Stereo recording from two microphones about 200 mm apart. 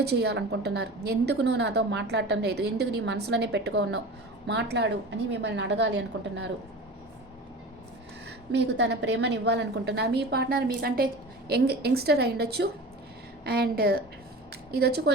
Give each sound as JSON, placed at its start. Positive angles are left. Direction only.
{"t": 0.0, "sound": "a woman's voice", "side_deg": -55}
{"t": 8.5, "sound": "a woman's voice", "side_deg": -60}